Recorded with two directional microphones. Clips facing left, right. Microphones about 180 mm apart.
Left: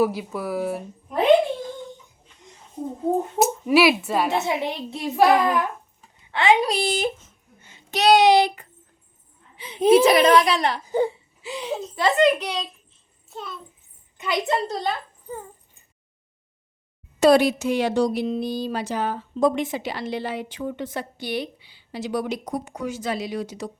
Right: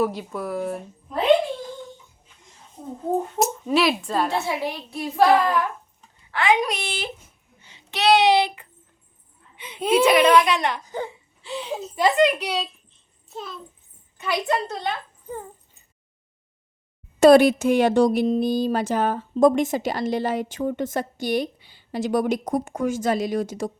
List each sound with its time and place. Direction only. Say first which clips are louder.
0.0 s speech: left 2 dB; 5° left (ahead or behind)
3.3 s speech: left 5 dB; 5° left (ahead or behind)
4.3 s a child's voice: left 2 dB; 20° left (ahead or behind); by 7.1 s 40° left (ahead or behind)
7.6 s child singing: left 2 dB; 45° left (ahead or behind)
9.6 s speech: left 4 dB; 30° left (ahead or behind)
11.4 s speech: left 1 dB; centre (ahead or behind)
11.9 s a child's voice: even; 15° right (ahead or behind)
14.2 s a child's voice: even; 20° left (ahead or behind)
14.7 s a woman's voice: left 2 dB; 40° left (ahead or behind)
17.2 s speech: right 4 dB; 50° right (ahead or behind)